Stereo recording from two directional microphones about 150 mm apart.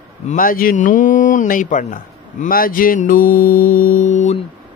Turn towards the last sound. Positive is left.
turn(degrees=55)  # may be behind; listen again after turning